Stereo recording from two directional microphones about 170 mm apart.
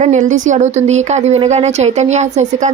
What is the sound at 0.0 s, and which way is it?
Speech, 45° right (ahead or behind).